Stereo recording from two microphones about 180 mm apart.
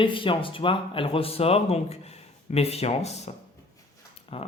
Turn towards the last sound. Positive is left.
turn(degrees=30)  # may be behind; listen again after turning